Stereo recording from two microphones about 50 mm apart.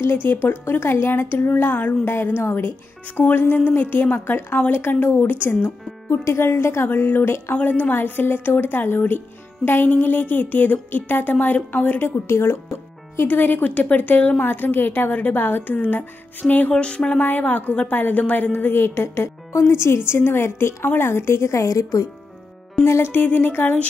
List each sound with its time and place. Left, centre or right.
0.0 s a woman's voice: left
6.9 s speech: left
7.6 s a woman's voice: left
12.3 s a woman's voice: left
13.3 s a woman's voice: left
16.7 s a sound: centre
17.2 s a woman's voice: left
22.8 s a woman's voice: left
23.1 s speech: left